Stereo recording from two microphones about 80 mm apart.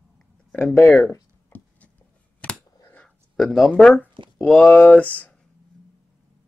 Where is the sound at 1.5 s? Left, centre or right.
Left.